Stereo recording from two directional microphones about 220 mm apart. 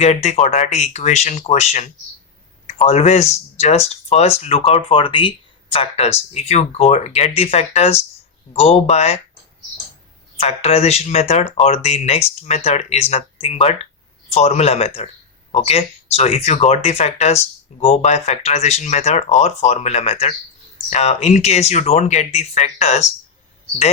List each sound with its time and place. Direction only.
0.0 s speech: 30° left (ahead or behind)
10.3 s speech: 30° left (ahead or behind)